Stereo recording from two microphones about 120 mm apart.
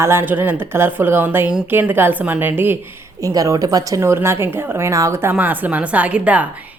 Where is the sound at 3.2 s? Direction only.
25° right (ahead or behind).